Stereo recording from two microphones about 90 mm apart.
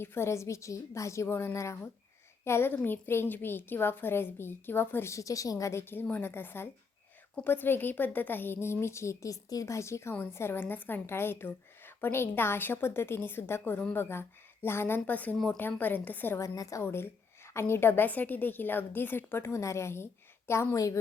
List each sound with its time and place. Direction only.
0.0 s a woman's voice: 25° left (ahead or behind)
16.4 s a woman's voice: 35° left (ahead or behind)